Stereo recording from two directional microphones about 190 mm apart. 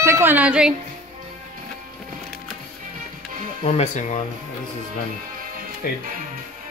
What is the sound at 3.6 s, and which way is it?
Speech, 35° left (ahead or behind).